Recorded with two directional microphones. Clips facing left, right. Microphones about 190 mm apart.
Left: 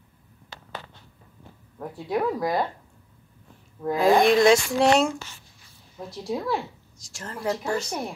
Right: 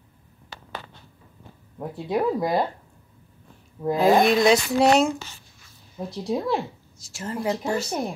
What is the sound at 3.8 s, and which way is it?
Speech, 20° right (ahead or behind).